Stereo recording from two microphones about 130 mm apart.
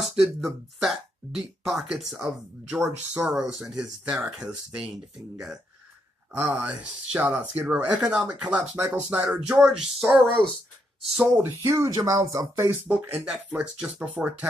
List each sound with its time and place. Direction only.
0.0 s speech: centre (ahead or behind)
6.3 s speech: 10° right (ahead or behind)
11.4 s speech: 15° right (ahead or behind)